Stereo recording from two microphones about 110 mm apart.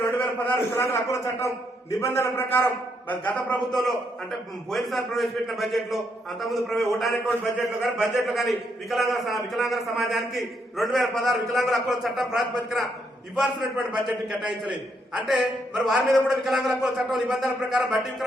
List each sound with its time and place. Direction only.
0.0 s a man's voice: 20° left (ahead or behind)
3.7 s a man's voice: centre (ahead or behind)